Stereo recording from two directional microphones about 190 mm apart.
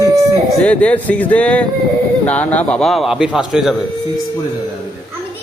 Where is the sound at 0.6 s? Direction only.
5° left (ahead or behind).